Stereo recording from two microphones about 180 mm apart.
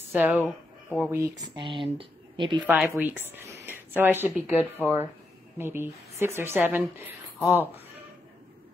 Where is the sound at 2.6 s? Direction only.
5° right (ahead or behind).